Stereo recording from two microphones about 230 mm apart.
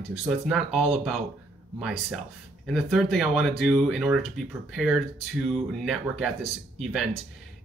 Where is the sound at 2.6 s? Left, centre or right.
Centre.